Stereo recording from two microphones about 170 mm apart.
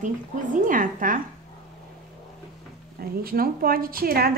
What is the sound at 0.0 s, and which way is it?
A woman's voice, 50° right (ahead or behind).